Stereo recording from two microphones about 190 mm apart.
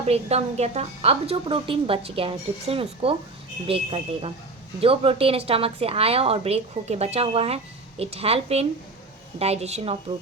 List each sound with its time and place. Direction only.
0.0 s a woman's voice: 35° right (ahead or behind)